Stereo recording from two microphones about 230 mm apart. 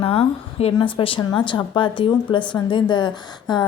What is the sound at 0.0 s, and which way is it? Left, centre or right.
A woman's voice, left.